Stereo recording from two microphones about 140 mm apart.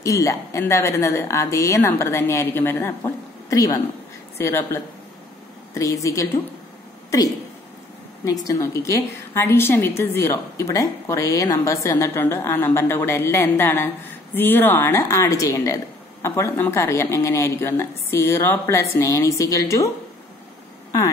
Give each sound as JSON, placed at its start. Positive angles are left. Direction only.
{"t": 0.0, "sound": "speech", "side_deg": 20}
{"t": 5.8, "sound": "speech", "side_deg": 20}
{"t": 8.3, "sound": "a woman's voice", "side_deg": 25}